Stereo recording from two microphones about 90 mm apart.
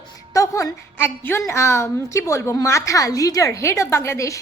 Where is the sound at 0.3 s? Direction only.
35° left (ahead or behind).